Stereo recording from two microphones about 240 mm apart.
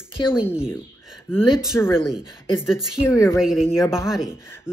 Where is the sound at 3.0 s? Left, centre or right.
Centre.